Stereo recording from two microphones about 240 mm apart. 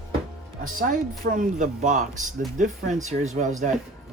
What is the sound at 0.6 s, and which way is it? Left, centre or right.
Speech, right.